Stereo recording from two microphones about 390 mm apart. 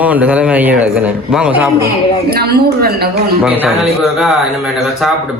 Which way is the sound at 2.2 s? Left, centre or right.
Right.